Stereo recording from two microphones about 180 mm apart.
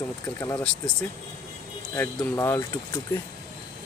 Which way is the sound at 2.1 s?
15° left (ahead or behind).